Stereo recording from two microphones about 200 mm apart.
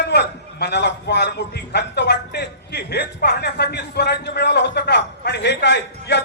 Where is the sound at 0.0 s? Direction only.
55° left (ahead or behind).